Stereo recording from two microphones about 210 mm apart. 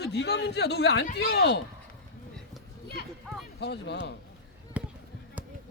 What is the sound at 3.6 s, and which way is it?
Speech, 55° left (ahead or behind).